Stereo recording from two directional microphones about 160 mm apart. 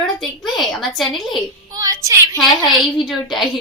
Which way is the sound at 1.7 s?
20° right (ahead or behind).